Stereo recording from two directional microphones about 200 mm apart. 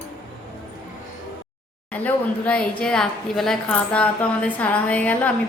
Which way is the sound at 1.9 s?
5° left (ahead or behind).